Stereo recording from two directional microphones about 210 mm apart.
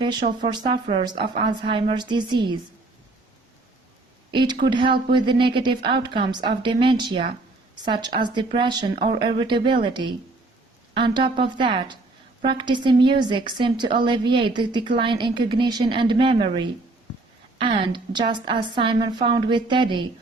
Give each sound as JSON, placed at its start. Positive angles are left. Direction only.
{"t": 0.0, "sound": "a woman's voice", "side_deg": -20}
{"t": 4.3, "sound": "a woman's voice", "side_deg": -20}